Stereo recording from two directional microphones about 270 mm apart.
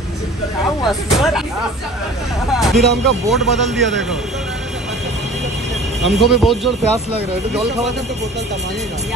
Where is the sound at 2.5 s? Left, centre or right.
Centre.